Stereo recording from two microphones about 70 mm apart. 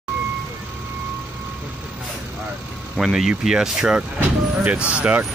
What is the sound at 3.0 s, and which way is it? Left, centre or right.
Speech, centre.